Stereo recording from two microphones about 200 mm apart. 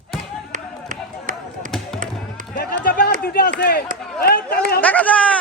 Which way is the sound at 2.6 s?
50° left (ahead or behind).